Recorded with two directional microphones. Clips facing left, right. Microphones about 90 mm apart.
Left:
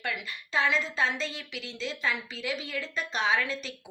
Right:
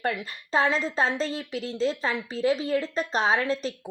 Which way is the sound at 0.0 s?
40° right (ahead or behind).